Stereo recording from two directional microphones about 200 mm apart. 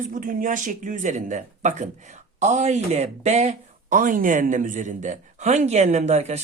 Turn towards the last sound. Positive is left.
turn(degrees=-35)  # may be behind; listen again after turning